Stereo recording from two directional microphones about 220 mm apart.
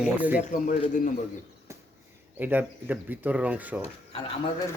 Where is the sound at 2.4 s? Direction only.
10° right (ahead or behind).